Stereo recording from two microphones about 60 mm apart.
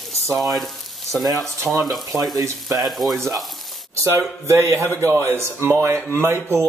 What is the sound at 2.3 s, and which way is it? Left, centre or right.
Speech, right.